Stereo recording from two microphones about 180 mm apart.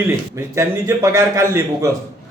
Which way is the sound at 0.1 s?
15° right (ahead or behind).